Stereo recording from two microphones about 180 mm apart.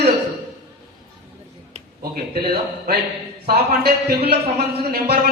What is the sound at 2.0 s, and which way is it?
A man's voice, 60° right (ahead or behind).